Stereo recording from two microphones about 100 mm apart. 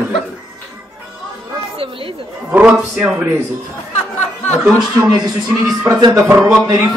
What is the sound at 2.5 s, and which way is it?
Speech, 10° right (ahead or behind).